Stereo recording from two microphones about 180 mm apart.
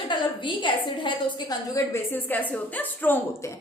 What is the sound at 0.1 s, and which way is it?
A woman's voice, 25° left (ahead or behind).